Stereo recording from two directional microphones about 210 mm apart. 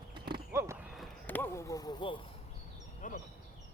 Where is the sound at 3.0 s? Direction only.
40° left (ahead or behind).